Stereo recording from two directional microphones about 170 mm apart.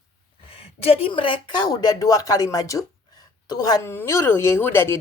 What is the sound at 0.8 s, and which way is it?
A woman's voice, 35° left (ahead or behind).